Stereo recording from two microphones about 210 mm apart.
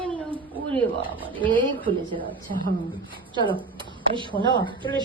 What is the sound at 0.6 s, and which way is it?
Speech, 10° left (ahead or behind).